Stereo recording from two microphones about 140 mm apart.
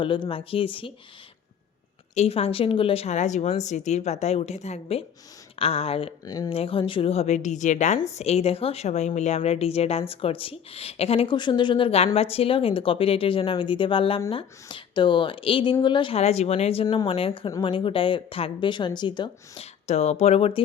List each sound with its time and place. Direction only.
0.0 s speech: 35° left (ahead or behind)
2.1 s speech: 45° left (ahead or behind)
6.2 s speech: 25° left (ahead or behind)
6.5 s speech: 40° left (ahead or behind); by 8.0 s 60° left (ahead or behind)
8.2 s speech: 50° left (ahead or behind)
16.8 s speech: 30° left (ahead or behind)
19.9 s speech: 50° left (ahead or behind)